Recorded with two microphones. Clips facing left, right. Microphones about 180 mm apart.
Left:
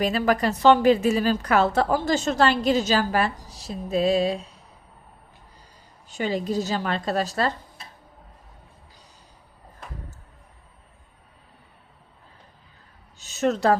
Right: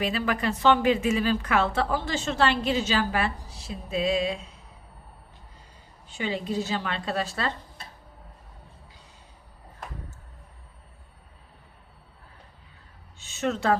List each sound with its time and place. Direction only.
0.0 s a woman's voice: 40° left (ahead or behind)
6.1 s a woman's voice: 40° left (ahead or behind)
13.1 s a sound: 40° left (ahead or behind)